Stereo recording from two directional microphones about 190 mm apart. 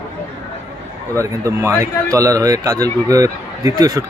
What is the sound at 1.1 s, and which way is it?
A man's voice, 15° right (ahead or behind).